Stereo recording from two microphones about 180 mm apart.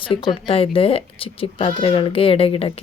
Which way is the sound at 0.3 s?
30° left (ahead or behind).